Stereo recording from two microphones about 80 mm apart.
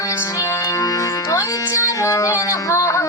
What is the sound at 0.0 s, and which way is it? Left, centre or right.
Music, left.